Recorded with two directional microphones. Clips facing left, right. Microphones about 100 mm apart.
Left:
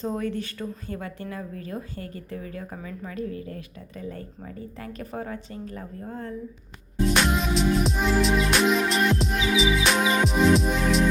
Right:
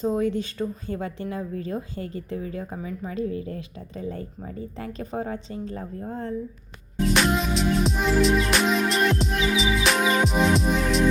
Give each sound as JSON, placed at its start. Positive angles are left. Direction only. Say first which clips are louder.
{"t": 0.0, "sound": "speech", "louder": "right 5 dB", "side_deg": -15}
{"t": 7.1, "sound": "music", "louder": "right 1 dB", "side_deg": 0}